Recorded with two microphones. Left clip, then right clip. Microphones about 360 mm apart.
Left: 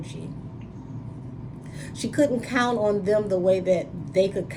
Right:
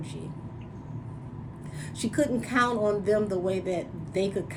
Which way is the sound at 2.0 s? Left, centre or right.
Centre.